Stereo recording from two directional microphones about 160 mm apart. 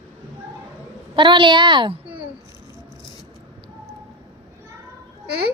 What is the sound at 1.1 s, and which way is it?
Speech, 30° right (ahead or behind).